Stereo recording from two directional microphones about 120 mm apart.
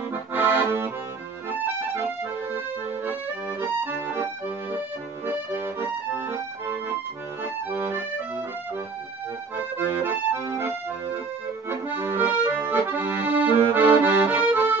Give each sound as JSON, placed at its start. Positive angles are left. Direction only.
{"t": 0.1, "sound": "accordion", "side_deg": -15}
{"t": 3.6, "sound": "accordion", "side_deg": -20}
{"t": 9.8, "sound": "accordion", "side_deg": -20}